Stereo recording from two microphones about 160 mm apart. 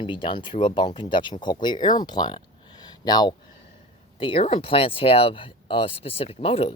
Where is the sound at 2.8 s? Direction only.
25° left (ahead or behind).